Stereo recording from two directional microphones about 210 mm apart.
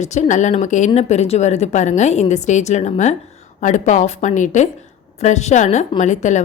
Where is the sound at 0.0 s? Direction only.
35° left (ahead or behind).